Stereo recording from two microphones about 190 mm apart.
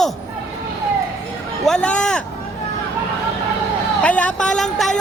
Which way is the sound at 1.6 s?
5° left (ahead or behind).